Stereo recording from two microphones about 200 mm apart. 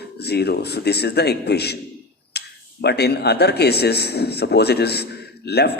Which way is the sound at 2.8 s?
55° left (ahead or behind).